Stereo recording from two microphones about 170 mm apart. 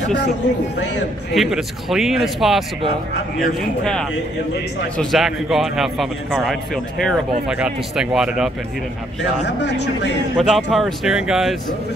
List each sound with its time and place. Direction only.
1.3 s a man's voice: centre (ahead or behind)
4.9 s a man's voice: centre (ahead or behind)
9.5 s speech: 90° left
10.3 s a man's voice: centre (ahead or behind)